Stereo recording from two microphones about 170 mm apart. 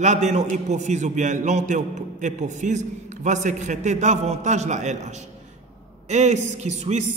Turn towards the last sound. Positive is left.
turn(degrees=-40)  # may be behind; listen again after turning